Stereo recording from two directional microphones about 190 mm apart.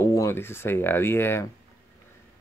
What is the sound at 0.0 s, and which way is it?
Speech, 15° left (ahead or behind).